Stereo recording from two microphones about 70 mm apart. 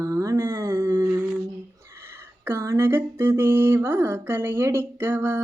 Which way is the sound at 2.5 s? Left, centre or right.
Right.